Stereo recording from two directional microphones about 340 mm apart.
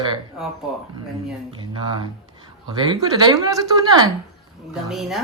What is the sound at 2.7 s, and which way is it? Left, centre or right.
Speech, centre.